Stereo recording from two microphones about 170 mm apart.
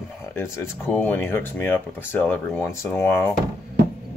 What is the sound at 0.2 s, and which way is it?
Speech, 15° left (ahead or behind).